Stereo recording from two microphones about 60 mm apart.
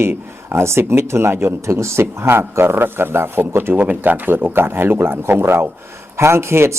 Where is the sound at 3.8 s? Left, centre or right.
Right.